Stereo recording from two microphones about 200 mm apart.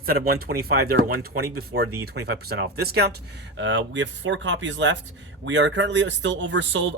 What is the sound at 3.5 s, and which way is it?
A man's voice, 65° right (ahead or behind).